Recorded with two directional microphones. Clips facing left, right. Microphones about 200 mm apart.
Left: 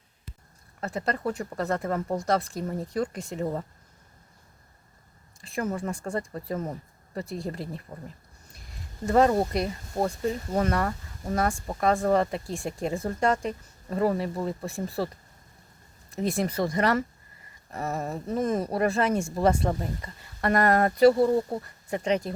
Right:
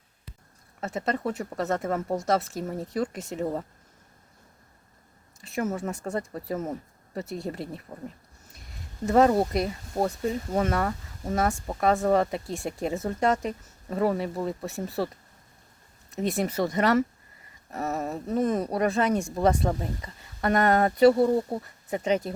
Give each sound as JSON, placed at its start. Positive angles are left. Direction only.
{"t": 0.8, "sound": "speech", "side_deg": 0}
{"t": 5.4, "sound": "speech", "side_deg": -5}